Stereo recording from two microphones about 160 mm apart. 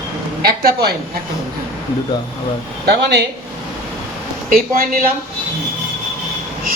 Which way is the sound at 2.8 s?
90° right.